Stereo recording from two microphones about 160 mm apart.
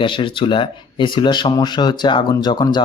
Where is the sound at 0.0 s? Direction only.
30° left (ahead or behind).